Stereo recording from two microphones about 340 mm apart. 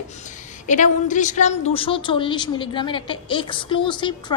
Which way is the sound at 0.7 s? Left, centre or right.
Left.